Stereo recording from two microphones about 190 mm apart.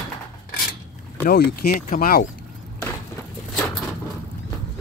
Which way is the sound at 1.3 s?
50° left (ahead or behind).